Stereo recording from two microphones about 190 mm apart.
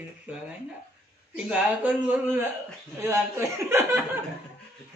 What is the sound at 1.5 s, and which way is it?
A man's voice, 10° right (ahead or behind).